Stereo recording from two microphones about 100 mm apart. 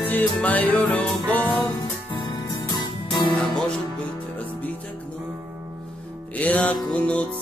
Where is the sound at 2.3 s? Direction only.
45° left (ahead or behind).